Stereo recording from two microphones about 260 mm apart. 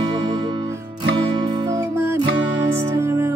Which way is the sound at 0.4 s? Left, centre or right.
Centre.